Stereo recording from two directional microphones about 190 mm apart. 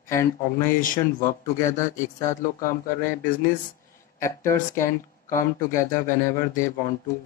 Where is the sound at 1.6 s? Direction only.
15° left (ahead or behind).